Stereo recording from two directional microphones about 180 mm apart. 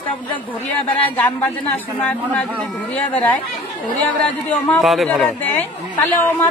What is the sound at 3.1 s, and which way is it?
Speech, 10° left (ahead or behind).